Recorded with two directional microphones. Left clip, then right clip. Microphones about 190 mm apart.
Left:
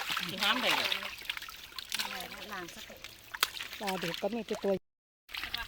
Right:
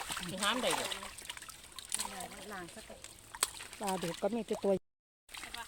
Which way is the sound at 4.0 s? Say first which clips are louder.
Left 3 dB; 20° right (ahead or behind).